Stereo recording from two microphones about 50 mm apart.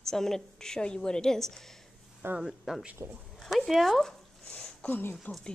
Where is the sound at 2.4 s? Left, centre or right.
Centre.